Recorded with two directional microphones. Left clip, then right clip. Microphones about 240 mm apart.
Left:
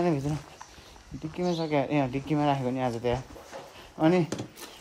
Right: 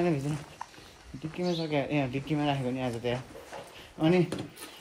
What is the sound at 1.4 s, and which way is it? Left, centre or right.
Speech, left.